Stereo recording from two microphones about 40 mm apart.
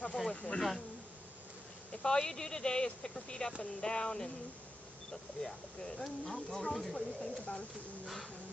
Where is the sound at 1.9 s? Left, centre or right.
Left.